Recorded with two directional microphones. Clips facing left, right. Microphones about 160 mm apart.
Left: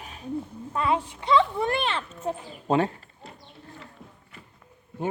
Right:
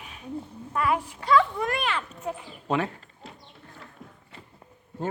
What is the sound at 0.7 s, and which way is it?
Speech, 25° left (ahead or behind).